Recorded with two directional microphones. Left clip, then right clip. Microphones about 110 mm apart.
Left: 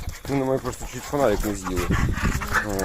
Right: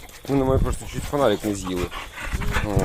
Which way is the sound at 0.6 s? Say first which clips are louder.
Even; centre (ahead or behind).